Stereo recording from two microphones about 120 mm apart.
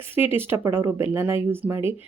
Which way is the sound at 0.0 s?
20° right (ahead or behind).